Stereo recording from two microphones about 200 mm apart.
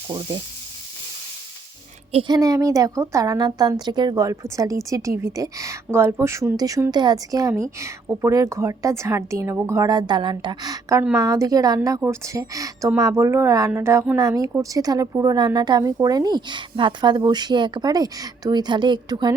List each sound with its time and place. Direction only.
2.1 s a woman's voice: 20° right (ahead or behind)